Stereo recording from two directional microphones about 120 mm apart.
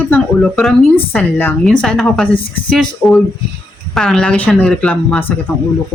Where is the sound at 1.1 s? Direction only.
15° left (ahead or behind).